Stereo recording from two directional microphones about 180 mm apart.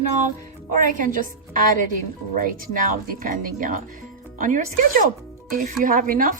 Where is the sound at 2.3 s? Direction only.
50° right (ahead or behind).